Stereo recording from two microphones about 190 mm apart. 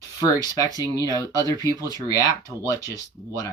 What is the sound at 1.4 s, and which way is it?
Speech, 20° left (ahead or behind).